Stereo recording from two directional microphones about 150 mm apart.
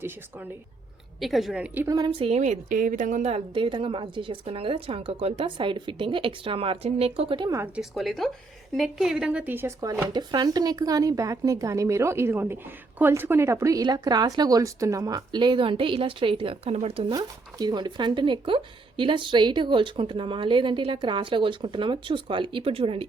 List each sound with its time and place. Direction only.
1.2 s a woman's voice: centre (ahead or behind)
1.9 s speech: 30° right (ahead or behind)
7.8 s a woman's voice: centre (ahead or behind); by 10.1 s 20° right (ahead or behind)
10.1 s speech: 30° right (ahead or behind)
17.1 s speech: 25° right (ahead or behind)